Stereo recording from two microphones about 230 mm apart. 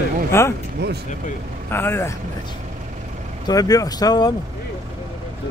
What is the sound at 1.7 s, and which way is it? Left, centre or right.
Speech, centre.